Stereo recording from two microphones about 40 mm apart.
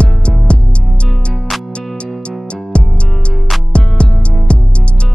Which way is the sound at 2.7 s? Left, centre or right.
Left.